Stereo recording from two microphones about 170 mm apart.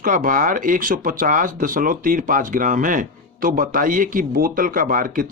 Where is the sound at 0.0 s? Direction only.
55° right (ahead or behind).